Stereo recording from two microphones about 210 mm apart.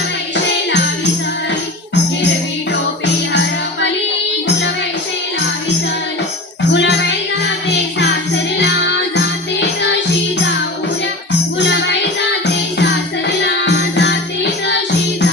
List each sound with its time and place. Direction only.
0.3 s music: 60° left (ahead or behind)
3.3 s music: 60° left (ahead or behind)
6.7 s music: 55° left (ahead or behind)
11.6 s music: 55° left (ahead or behind)